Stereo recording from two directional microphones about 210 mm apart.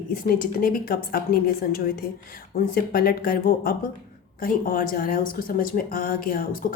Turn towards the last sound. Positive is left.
turn(degrees=40)  # may be behind; listen again after turning